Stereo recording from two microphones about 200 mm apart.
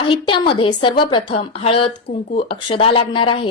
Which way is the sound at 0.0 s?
25° left (ahead or behind).